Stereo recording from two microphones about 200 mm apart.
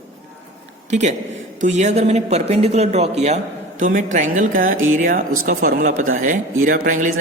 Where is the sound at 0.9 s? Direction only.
35° right (ahead or behind).